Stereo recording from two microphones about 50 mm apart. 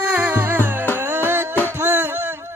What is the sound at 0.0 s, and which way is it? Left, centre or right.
Music, right.